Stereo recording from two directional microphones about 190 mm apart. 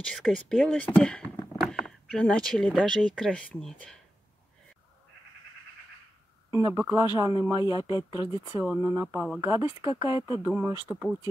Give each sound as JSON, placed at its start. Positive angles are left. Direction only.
{"t": 0.0, "sound": "speech", "side_deg": 5}
{"t": 6.5, "sound": "speech", "side_deg": -15}
{"t": 8.6, "sound": "speech", "side_deg": -5}
{"t": 9.4, "sound": "speech", "side_deg": -15}